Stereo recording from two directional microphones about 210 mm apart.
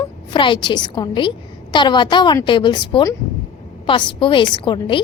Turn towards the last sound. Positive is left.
turn(degrees=25)  # may be behind; listen again after turning